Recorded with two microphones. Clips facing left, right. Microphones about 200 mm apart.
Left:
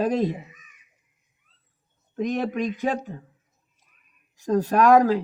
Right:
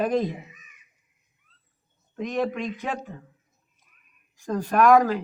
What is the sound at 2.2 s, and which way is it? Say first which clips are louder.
Speech: left 2 dB; 40° left (ahead or behind).